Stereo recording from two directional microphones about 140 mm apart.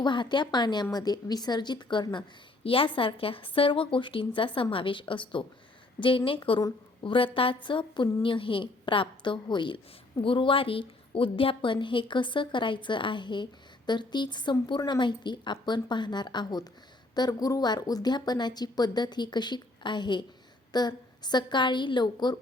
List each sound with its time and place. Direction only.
0.0 s a woman's voice: 35° left (ahead or behind)